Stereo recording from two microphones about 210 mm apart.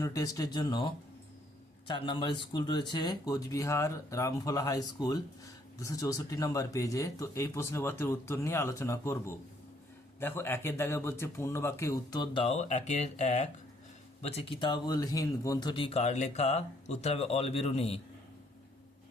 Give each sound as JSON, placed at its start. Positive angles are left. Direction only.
{"t": 0.0, "sound": "speech", "side_deg": 15}
{"t": 1.9, "sound": "speech", "side_deg": 25}